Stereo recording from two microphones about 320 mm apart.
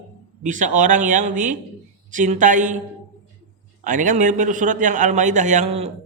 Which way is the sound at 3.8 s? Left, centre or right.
Right.